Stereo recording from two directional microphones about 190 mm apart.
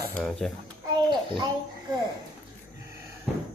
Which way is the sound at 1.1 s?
25° right (ahead or behind).